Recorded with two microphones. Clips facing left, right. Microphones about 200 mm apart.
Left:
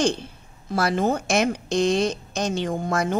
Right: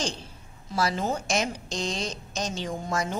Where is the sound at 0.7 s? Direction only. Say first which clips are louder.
Left 5 dB; 60° left (ahead or behind).